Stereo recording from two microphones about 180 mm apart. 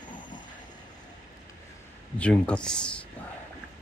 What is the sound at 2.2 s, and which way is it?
Speech, 5° left (ahead or behind).